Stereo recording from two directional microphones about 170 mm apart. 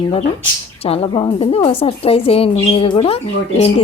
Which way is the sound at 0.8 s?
35° left (ahead or behind).